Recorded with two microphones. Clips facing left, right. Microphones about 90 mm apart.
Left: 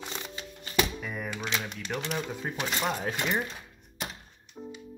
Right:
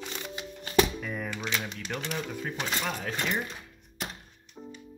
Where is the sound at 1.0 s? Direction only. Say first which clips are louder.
Right 1 dB; 5° left (ahead or behind).